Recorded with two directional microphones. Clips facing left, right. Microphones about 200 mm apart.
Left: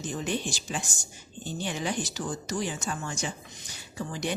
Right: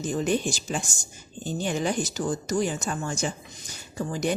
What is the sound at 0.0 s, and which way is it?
Speech, 45° right (ahead or behind).